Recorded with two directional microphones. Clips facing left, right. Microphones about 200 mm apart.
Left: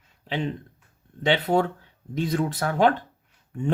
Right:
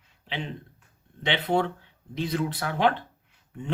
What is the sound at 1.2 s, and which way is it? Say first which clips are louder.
Speech: left 4 dB; 40° left (ahead or behind).